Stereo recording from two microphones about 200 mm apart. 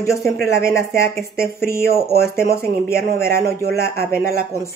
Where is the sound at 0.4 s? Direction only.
45° right (ahead or behind).